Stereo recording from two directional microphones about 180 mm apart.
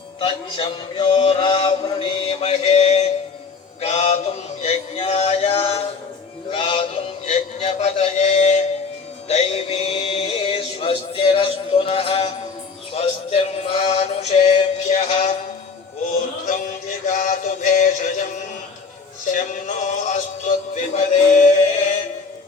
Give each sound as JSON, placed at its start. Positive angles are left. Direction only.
{"t": 0.2, "sound": "mantra", "side_deg": 30}
{"t": 3.8, "sound": "male singing", "side_deg": 35}
{"t": 6.5, "sound": "music", "side_deg": 30}
{"t": 16.5, "sound": "music", "side_deg": 45}